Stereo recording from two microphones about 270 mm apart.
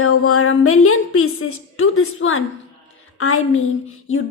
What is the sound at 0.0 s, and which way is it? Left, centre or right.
A woman's voice, left.